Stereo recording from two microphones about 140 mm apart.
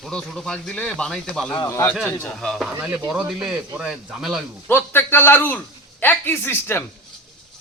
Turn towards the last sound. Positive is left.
turn(degrees=15)  # may be behind; listen again after turning